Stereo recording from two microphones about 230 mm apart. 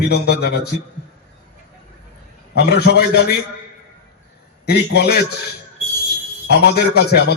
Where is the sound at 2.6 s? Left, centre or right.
Left.